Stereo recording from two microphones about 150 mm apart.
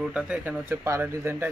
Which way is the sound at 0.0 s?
5° right (ahead or behind).